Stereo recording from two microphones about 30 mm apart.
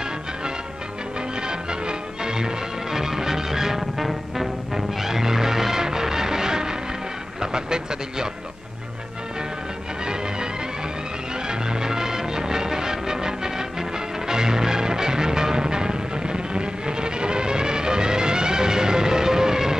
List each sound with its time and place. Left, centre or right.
1.5 s music: right
7.5 s speech: right
11.4 s music: right